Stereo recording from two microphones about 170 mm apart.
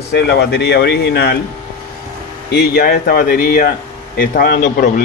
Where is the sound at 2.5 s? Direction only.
65° left (ahead or behind).